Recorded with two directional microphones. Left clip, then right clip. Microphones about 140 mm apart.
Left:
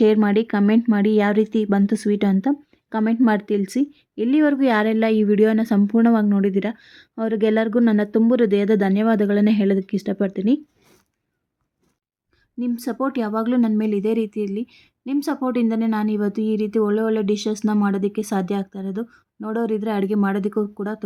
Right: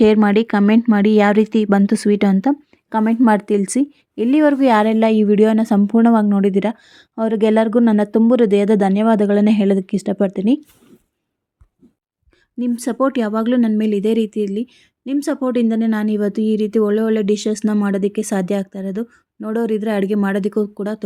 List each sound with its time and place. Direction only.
0.0 s speech: 35° right (ahead or behind)
12.5 s speech: 20° right (ahead or behind)